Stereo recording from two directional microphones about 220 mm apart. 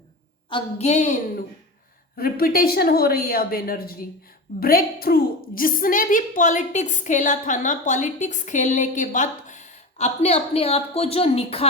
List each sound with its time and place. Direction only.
0.5 s a woman's voice: 30° left (ahead or behind)
2.1 s a woman's voice: 45° left (ahead or behind); by 11.6 s 25° left (ahead or behind)